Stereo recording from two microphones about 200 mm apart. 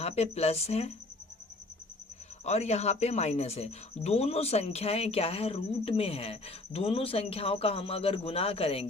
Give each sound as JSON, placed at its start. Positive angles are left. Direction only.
{"t": 0.0, "sound": "speech", "side_deg": 30}
{"t": 2.4, "sound": "speech", "side_deg": 35}